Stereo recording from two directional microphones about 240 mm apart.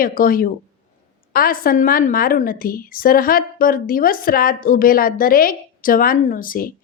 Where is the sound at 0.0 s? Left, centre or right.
Left.